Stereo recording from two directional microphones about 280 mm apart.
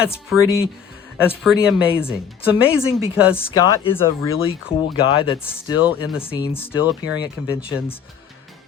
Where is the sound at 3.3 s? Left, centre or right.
Centre.